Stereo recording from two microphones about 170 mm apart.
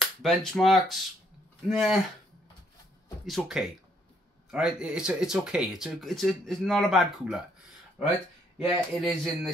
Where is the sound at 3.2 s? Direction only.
Centre (ahead or behind).